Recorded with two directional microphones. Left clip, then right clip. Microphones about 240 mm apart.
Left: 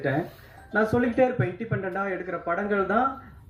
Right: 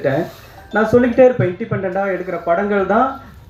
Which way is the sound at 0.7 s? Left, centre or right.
Left.